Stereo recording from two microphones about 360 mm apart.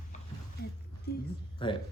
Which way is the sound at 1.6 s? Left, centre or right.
Centre.